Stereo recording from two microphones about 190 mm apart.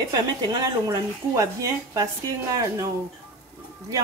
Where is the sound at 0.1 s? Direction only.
20° right (ahead or behind).